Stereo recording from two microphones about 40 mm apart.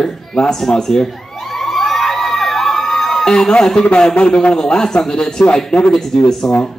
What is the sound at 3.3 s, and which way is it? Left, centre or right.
A man's voice, centre.